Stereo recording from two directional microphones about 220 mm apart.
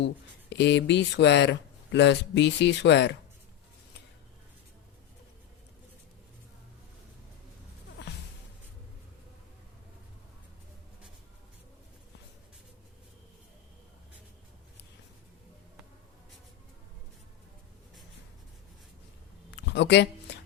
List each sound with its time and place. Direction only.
0.5 s speech: 55° left (ahead or behind)
8.0 s music: 50° left (ahead or behind)
19.5 s a sound: 50° left (ahead or behind)